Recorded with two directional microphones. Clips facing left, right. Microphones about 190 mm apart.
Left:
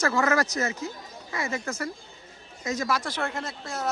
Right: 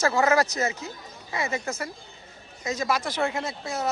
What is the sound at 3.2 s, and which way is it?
Speech, 5° right (ahead or behind).